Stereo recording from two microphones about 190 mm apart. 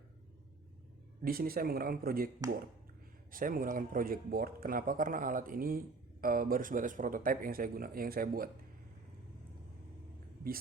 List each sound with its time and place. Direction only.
1.2 s speech: 50° right (ahead or behind)
3.3 s speech: 45° right (ahead or behind)